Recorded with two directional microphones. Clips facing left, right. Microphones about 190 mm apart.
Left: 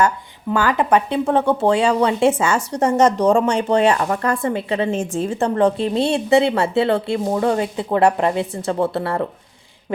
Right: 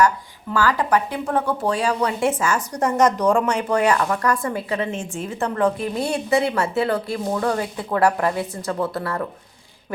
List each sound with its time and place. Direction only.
0.5 s a woman's voice: 20° left (ahead or behind)